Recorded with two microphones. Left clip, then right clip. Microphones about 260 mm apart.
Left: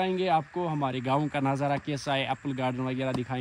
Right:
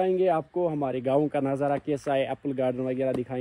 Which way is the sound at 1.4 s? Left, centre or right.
Left.